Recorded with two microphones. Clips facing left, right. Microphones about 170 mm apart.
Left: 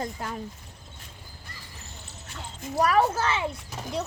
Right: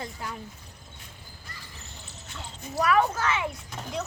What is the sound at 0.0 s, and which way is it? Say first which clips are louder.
Speech: left 4 dB; 45° left (ahead or behind).